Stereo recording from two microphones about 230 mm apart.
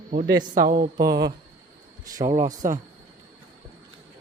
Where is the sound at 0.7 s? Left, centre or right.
Right.